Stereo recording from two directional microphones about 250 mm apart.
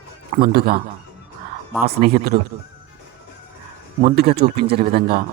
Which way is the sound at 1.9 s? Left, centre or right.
Right.